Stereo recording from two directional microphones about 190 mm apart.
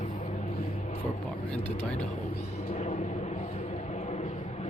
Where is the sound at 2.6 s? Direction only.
35° left (ahead or behind).